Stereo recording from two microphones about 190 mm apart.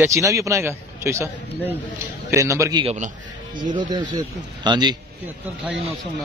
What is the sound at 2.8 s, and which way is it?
Speech, 40° right (ahead or behind).